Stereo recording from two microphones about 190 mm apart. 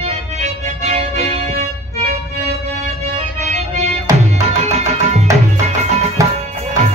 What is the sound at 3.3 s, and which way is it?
Music, 35° right (ahead or behind).